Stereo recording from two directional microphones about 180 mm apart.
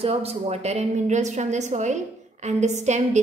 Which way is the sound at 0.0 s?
35° right (ahead or behind).